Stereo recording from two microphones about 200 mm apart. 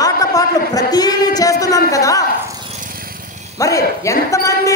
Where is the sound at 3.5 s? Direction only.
15° left (ahead or behind).